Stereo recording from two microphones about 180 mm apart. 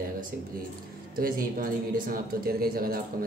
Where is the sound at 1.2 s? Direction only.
50° right (ahead or behind).